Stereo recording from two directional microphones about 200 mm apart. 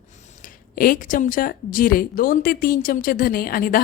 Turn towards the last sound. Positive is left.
turn(degrees=45)  # may be behind; listen again after turning